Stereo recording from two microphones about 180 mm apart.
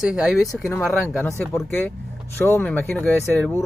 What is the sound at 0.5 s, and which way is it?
Speech, 15° left (ahead or behind).